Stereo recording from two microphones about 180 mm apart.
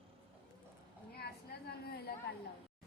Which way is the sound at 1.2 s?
60° left (ahead or behind).